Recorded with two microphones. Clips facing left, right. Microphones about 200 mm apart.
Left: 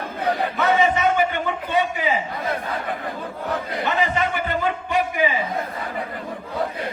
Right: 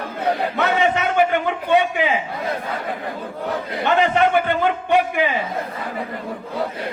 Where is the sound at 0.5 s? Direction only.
65° right (ahead or behind).